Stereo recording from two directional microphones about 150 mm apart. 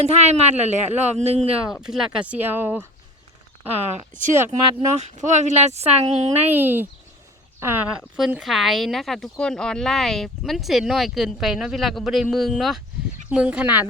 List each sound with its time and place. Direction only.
0.0 s speech: 45° right (ahead or behind)
1.9 s speech: 5° right (ahead or behind)
4.7 s speech: 50° right (ahead or behind)
6.5 s speech: 15° right (ahead or behind)